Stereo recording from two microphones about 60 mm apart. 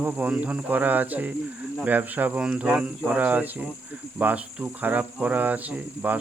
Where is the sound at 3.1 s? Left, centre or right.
Right.